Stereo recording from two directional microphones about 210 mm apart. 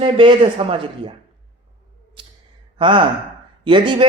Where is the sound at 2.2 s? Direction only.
25° right (ahead or behind).